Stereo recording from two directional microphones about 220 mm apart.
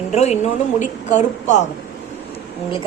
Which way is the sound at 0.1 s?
30° left (ahead or behind).